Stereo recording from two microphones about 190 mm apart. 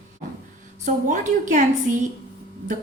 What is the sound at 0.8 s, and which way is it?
A woman's voice, 40° right (ahead or behind).